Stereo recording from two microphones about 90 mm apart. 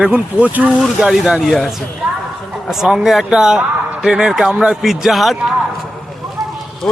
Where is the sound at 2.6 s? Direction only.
5° right (ahead or behind).